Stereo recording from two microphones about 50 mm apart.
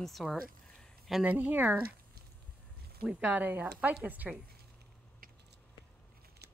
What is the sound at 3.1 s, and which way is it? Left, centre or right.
A woman's voice, right.